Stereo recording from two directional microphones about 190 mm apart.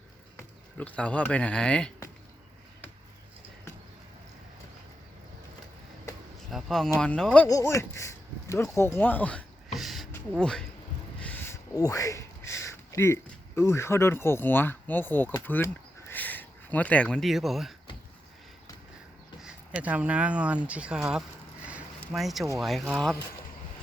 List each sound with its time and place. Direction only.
0.3 s speech: 5° left (ahead or behind)
6.5 s speech: centre (ahead or behind)
7.4 s speech: 15° left (ahead or behind)
9.7 s a sound: centre (ahead or behind)
11.2 s a sound: 10° left (ahead or behind)
13.6 s speech: 15° left (ahead or behind)
19.4 s speech: 5° right (ahead or behind)